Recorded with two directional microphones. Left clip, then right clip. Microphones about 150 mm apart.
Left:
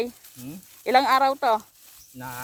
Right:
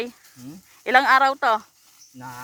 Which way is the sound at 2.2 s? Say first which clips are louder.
Left 1 dB; 30° left (ahead or behind).